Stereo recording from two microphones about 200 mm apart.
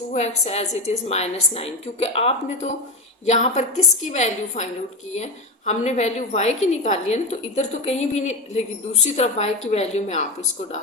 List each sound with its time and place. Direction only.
0.1 s a woman's voice: 35° left (ahead or behind)